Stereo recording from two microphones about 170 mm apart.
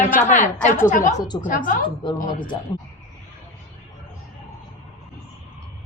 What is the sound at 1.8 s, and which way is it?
Speech, 30° left (ahead or behind).